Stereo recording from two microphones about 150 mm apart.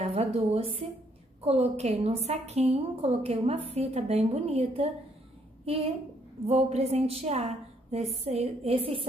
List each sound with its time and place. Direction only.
0.0 s a woman's voice: 45° right (ahead or behind)